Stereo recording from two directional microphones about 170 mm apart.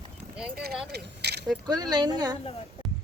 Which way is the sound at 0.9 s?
70° right (ahead or behind).